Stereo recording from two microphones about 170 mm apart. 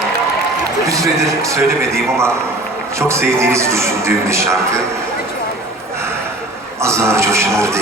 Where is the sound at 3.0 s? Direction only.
15° right (ahead or behind).